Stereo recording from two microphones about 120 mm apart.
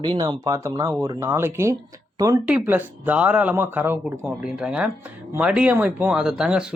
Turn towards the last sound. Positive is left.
turn(degrees=-5)  # may be behind; listen again after turning